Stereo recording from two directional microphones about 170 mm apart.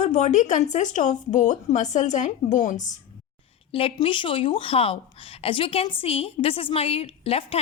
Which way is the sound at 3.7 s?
30° left (ahead or behind).